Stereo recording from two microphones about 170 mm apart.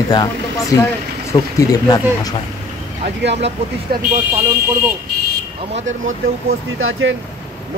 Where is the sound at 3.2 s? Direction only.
90° right.